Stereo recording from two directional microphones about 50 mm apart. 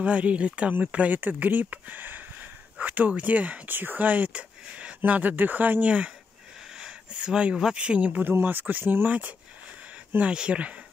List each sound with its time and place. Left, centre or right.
0.0 s speech: right
3.7 s speech: right
5.9 s speech: right
6.7 s a sound: centre
7.7 s speech: right
8.2 s speech: right
10.2 s speech: right